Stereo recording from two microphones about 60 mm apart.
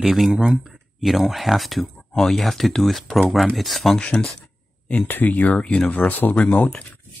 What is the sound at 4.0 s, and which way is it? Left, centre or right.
Speech, centre.